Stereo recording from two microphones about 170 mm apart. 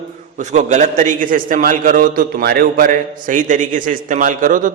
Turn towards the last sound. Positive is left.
turn(degrees=-50)  # may be behind; listen again after turning